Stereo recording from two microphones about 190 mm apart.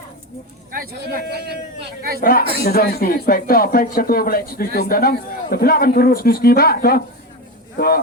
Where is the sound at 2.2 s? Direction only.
50° left (ahead or behind).